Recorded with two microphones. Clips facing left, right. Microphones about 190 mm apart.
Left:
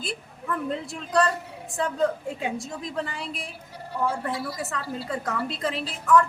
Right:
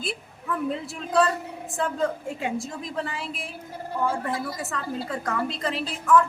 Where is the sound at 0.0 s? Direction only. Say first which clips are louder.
Right 1 dB; centre (ahead or behind).